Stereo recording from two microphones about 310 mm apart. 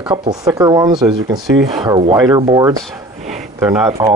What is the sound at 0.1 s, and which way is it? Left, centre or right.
Speech, centre.